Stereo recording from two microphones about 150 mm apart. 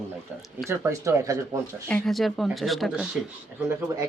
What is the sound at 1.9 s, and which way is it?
Speech, 5° left (ahead or behind).